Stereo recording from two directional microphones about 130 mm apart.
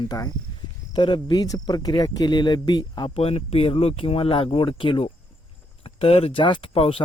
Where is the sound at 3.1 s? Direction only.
50° left (ahead or behind).